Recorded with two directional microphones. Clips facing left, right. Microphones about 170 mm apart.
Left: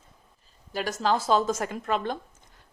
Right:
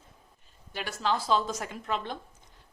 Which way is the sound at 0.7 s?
40° left (ahead or behind).